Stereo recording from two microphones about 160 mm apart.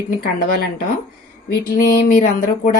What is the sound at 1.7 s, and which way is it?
Speech, 65° left (ahead or behind).